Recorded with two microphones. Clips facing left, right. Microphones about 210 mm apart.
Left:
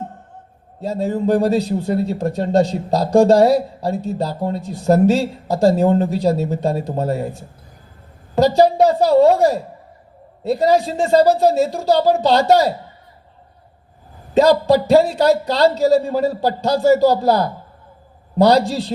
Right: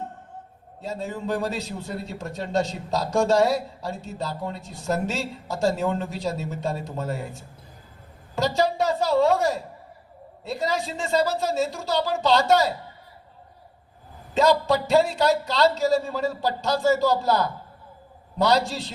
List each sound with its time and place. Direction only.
0.8 s a man's voice: 40° left (ahead or behind)
8.4 s a man's voice: 40° left (ahead or behind)
14.3 s a man's voice: 40° left (ahead or behind)